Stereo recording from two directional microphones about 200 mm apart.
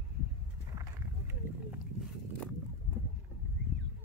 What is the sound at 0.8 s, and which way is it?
Wild animals, 10° right (ahead or behind).